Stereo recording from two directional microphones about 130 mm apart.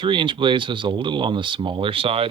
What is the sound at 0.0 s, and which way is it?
Speech, 40° right (ahead or behind).